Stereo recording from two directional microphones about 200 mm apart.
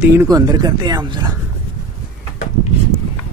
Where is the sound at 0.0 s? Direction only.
10° right (ahead or behind).